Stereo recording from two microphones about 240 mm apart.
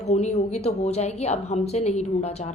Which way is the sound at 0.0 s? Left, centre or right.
Left.